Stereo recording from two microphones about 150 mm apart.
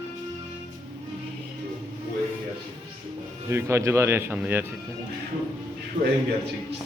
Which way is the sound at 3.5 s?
15° right (ahead or behind).